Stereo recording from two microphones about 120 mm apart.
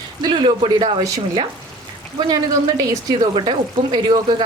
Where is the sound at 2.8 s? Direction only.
35° right (ahead or behind).